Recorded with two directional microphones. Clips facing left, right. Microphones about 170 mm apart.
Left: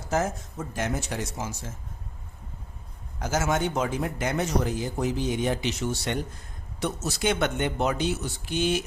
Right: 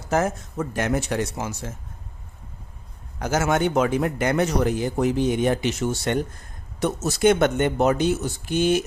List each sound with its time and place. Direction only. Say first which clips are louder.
0.1 s a man's voice: right 4 dB; 65° right (ahead or behind)
3.2 s a man's voice: right 4 dB; 65° right (ahead or behind)